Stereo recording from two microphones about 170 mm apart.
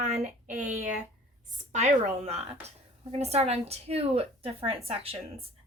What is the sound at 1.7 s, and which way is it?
A woman's voice, 45° right (ahead or behind).